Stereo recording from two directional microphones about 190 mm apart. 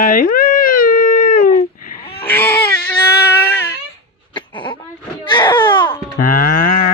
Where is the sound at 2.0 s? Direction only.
30° left (ahead or behind).